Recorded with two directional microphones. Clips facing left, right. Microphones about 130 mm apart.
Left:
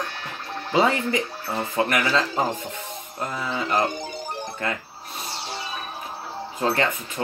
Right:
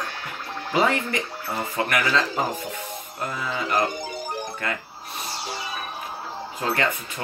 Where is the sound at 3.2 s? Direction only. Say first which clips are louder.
Left 1 dB; 25° left (ahead or behind).